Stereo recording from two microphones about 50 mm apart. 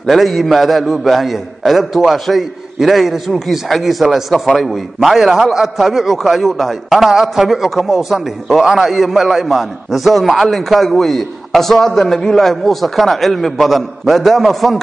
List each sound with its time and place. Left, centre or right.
0.0 s a man's voice: centre